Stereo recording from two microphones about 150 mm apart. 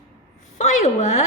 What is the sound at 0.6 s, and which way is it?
Speech, 50° left (ahead or behind).